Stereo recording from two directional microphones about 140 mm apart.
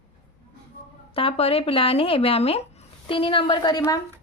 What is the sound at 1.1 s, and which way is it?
A woman's voice, 45° left (ahead or behind).